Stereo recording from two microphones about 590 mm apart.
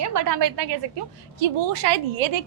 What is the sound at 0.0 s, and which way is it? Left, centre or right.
Speech, right.